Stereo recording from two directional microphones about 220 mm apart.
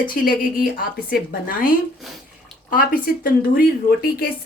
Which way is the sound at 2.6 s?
40° left (ahead or behind).